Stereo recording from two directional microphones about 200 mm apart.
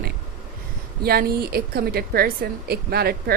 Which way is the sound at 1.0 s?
50° right (ahead or behind).